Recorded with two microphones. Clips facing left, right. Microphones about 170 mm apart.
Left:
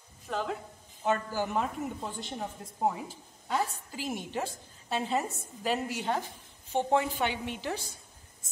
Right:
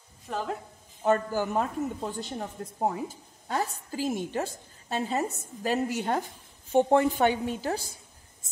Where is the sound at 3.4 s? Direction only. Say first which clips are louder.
Right 1 dB; 45° right (ahead or behind).